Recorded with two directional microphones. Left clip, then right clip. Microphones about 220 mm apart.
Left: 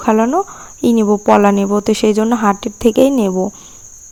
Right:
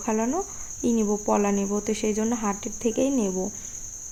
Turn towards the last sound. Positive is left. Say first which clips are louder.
# left 13 dB
turn(degrees=40)  # may be behind; listen again after turning